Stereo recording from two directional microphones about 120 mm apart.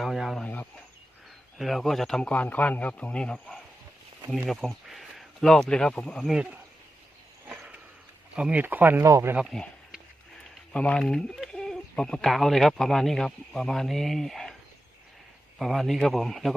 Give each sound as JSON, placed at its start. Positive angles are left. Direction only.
{"t": 0.0, "sound": "chicken", "side_deg": 0}
{"t": 0.4, "sound": "bird", "side_deg": 15}
{"t": 1.5, "sound": "speech", "side_deg": 0}
{"t": 6.3, "sound": "speech", "side_deg": -10}
{"t": 7.4, "sound": "a sound", "side_deg": -10}
{"t": 8.4, "sound": "speech", "side_deg": -10}
{"t": 9.5, "sound": "a sound", "side_deg": 0}
{"t": 10.7, "sound": "speech", "side_deg": 10}
{"t": 15.5, "sound": "speech", "side_deg": 0}